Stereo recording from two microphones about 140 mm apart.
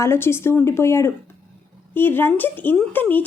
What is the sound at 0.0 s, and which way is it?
A woman's voice, 20° left (ahead or behind).